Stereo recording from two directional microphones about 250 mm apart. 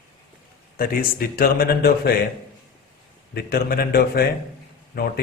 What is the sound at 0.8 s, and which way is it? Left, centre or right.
Speech, left.